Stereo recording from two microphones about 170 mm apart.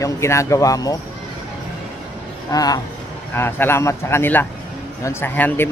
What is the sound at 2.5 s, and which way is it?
A man's voice, 20° left (ahead or behind).